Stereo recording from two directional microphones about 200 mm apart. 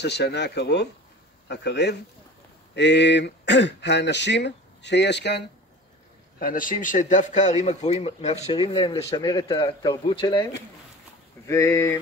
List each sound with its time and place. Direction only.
0.0 s speech: 55° left (ahead or behind)
6.4 s speech: 45° left (ahead or behind); by 10.4 s 25° left (ahead or behind)
11.4 s speech: 15° left (ahead or behind)